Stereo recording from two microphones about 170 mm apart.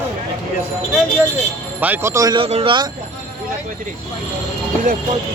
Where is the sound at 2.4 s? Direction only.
35° right (ahead or behind).